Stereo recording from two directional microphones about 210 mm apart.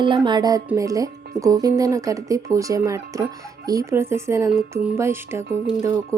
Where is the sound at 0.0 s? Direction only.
20° right (ahead or behind).